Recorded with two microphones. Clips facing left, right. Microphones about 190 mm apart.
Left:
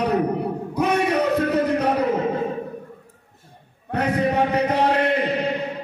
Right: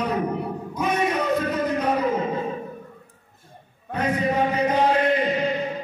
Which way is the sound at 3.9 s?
70° left (ahead or behind).